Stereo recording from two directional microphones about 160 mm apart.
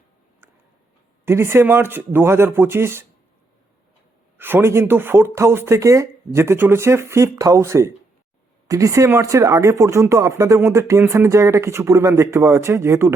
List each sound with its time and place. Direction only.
1.2 s speech: 15° right (ahead or behind)
4.4 s speech: 15° right (ahead or behind)